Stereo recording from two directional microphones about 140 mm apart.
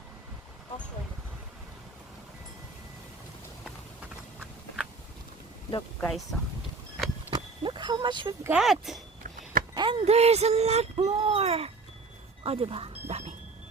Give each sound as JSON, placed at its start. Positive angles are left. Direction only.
{"t": 6.0, "sound": "speech", "side_deg": 5}
{"t": 7.3, "sound": "vehicle", "side_deg": -35}
{"t": 8.4, "sound": "speech", "side_deg": -5}
{"t": 9.2, "sound": "a sound", "side_deg": -70}
{"t": 9.7, "sound": "speech", "side_deg": -35}
{"t": 12.4, "sound": "dog", "side_deg": -40}